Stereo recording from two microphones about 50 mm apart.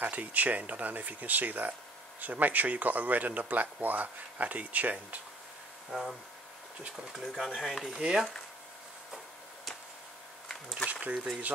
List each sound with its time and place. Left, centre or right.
0.0 s speech: right
5.9 s speech: centre
7.8 s speech: centre
10.9 s a sound: right